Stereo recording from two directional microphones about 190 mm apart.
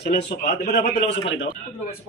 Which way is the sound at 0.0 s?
55° left (ahead or behind).